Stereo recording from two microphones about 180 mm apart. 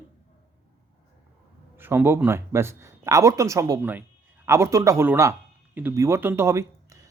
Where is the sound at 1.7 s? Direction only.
10° right (ahead or behind).